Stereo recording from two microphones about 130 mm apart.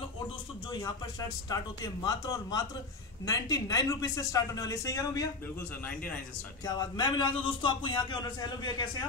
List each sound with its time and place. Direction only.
0.7 s a man's voice: 35° left (ahead or behind)
6.6 s a man's voice: 30° left (ahead or behind)